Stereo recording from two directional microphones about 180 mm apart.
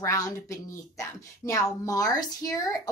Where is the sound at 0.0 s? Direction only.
15° left (ahead or behind).